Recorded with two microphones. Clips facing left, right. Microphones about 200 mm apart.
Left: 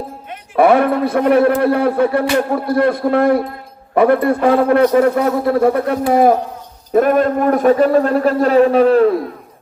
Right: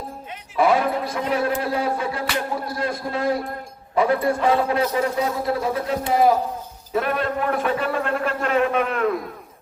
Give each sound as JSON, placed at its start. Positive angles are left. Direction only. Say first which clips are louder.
{"t": 0.3, "sound": "a man's voice", "louder": "left 7 dB", "side_deg": 60}